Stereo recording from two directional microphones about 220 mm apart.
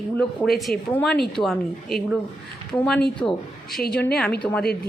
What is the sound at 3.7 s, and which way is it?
Speech, 45° left (ahead or behind).